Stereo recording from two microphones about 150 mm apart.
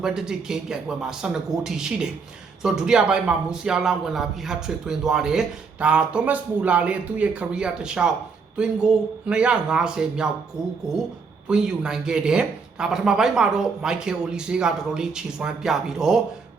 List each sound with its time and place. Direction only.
0.0 s a man's voice: 5° right (ahead or behind)